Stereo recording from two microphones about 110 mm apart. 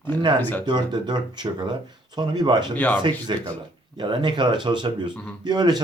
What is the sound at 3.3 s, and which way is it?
A man's voice, 45° right (ahead or behind).